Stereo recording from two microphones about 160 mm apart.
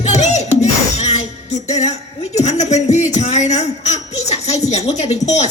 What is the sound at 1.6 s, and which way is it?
A woman's voice, 45° left (ahead or behind).